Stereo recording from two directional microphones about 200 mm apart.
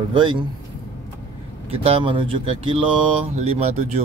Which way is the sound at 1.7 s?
30° right (ahead or behind).